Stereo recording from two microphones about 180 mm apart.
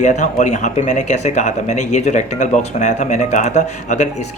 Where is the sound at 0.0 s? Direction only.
40° left (ahead or behind).